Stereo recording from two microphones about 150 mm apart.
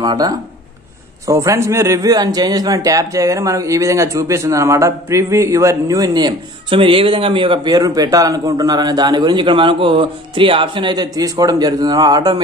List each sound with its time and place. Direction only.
0.0 s a man's voice: 25° right (ahead or behind)